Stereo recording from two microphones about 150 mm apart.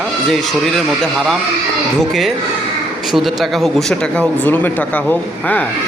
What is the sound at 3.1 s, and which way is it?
Speech, centre (ahead or behind).